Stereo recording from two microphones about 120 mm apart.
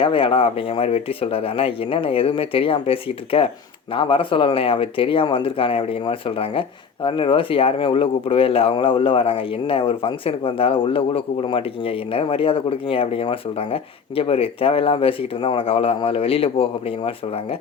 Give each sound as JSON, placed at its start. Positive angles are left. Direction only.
{"t": 0.0, "sound": "speech", "side_deg": 50}